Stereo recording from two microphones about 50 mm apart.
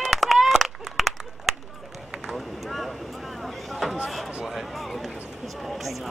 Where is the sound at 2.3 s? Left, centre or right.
Centre.